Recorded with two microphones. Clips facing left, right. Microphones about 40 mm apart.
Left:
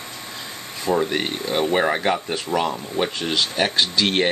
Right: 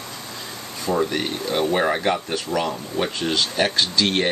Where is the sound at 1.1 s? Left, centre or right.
Left.